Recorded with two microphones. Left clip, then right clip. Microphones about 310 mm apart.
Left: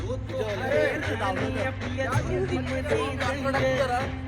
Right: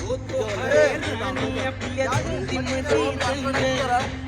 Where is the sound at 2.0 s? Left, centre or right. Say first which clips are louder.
Right 3 dB; right.